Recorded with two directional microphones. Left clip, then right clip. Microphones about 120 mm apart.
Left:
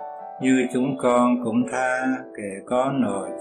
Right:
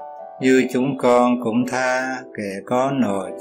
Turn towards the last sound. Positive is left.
turn(degrees=-45)  # may be behind; listen again after turning